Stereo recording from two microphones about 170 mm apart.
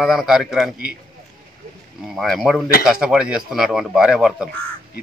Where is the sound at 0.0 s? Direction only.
Centre (ahead or behind).